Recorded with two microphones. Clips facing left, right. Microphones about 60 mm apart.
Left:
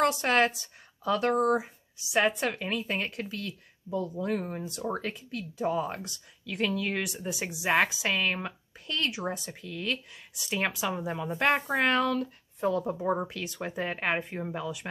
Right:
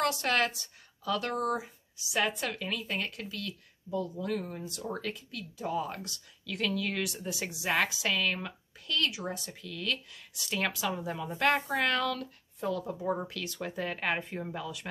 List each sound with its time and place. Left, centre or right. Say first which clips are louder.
0.0 s speech: left 4 dB; left